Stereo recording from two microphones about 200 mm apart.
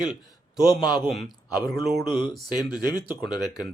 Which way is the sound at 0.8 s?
20° left (ahead or behind).